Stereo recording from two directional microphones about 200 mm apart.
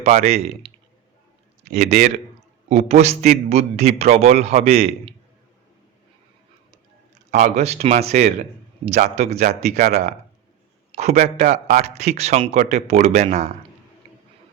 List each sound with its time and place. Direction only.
0.0 s a man's voice: 30° right (ahead or behind)
1.8 s a man's voice: 35° right (ahead or behind)
7.3 s a man's voice: 35° right (ahead or behind)